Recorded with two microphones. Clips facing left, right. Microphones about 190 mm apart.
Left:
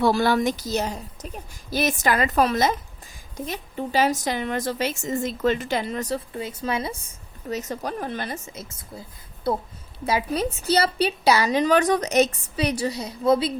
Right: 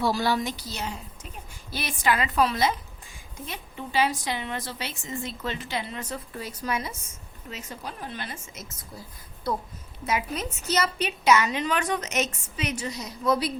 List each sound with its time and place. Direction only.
0.0 s a woman's voice: 55° left (ahead or behind); by 6.2 s 35° left (ahead or behind)
6.3 s a woman's voice: 25° left (ahead or behind)
7.5 s a woman's voice: 40° left (ahead or behind)
8.7 s a woman's voice: 25° left (ahead or behind)